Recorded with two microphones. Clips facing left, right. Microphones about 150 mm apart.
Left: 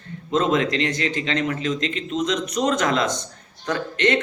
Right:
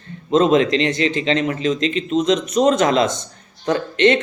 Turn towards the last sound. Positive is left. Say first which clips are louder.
# right 6 dB
turn(degrees=-25)  # may be behind; listen again after turning